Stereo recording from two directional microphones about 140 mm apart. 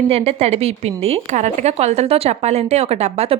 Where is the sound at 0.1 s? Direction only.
45° right (ahead or behind).